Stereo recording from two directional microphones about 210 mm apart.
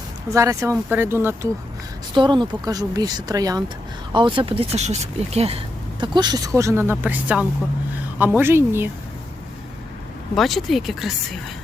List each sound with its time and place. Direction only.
0.3 s a woman's voice: 15° right (ahead or behind)
2.1 s a woman's voice: 20° right (ahead or behind)
10.3 s speech: centre (ahead or behind)